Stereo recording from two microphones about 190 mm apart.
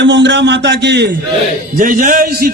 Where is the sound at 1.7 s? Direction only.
45° right (ahead or behind).